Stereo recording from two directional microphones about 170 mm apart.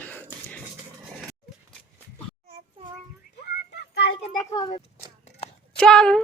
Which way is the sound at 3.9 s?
75° left (ahead or behind).